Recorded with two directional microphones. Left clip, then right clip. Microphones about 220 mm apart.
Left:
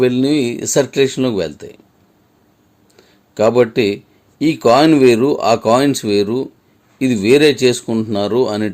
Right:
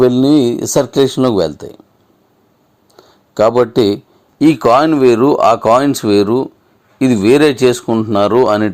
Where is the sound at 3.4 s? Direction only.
20° right (ahead or behind).